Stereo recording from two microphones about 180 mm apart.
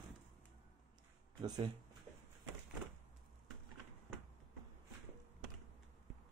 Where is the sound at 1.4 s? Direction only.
20° right (ahead or behind).